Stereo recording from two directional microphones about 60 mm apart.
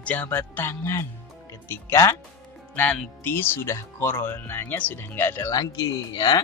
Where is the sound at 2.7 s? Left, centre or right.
Left.